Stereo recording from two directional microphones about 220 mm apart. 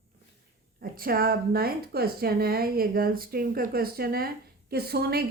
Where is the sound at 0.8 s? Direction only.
40° right (ahead or behind).